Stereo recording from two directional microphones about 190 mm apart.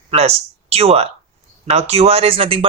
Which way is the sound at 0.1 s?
35° right (ahead or behind).